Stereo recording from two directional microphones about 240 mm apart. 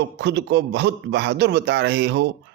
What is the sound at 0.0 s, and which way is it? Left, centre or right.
Speech, right.